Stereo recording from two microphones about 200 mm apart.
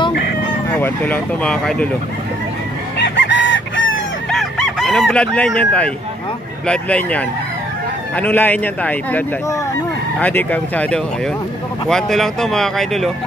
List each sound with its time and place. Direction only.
0.1 s chicken: 50° left (ahead or behind)
0.7 s a man's voice: 10° left (ahead or behind)
3.0 s chicken: 60° left (ahead or behind)
4.3 s chicken: centre (ahead or behind)
6.7 s a man's voice: 5° left (ahead or behind)